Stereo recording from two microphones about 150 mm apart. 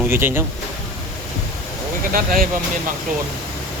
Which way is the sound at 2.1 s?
70° right (ahead or behind).